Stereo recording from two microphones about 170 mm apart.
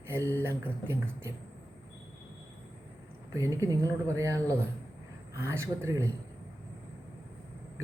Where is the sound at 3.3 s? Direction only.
20° right (ahead or behind).